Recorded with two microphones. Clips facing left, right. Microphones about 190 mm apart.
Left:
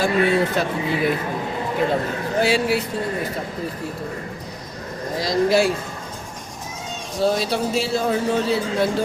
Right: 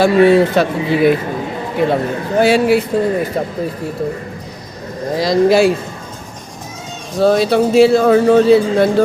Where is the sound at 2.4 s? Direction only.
55° right (ahead or behind).